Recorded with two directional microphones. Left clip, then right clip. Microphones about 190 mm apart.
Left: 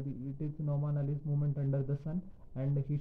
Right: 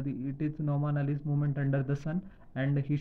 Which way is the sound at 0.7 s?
20° right (ahead or behind).